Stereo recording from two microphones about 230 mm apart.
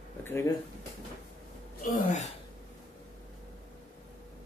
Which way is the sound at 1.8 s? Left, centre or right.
Left.